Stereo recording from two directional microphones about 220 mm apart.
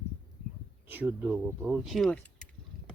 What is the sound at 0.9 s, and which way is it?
Speech, 10° right (ahead or behind).